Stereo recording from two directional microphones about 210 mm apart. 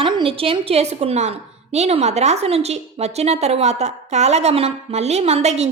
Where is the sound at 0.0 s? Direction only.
25° right (ahead or behind).